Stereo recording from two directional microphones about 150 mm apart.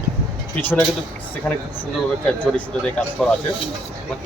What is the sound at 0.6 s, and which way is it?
Speech, 15° left (ahead or behind).